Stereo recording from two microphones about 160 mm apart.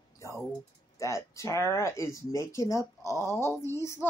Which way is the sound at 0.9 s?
20° left (ahead or behind).